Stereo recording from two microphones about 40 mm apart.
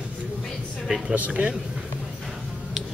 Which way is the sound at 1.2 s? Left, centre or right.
Right.